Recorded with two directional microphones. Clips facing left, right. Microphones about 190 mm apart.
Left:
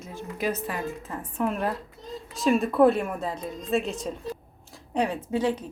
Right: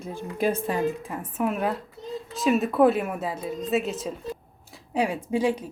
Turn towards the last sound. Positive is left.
turn(degrees=-10)  # may be behind; listen again after turning